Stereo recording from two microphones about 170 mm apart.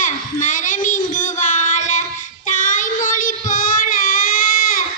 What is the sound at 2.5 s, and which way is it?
Child singing, 50° left (ahead or behind).